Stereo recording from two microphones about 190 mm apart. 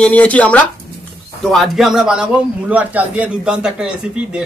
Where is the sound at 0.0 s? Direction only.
5° left (ahead or behind).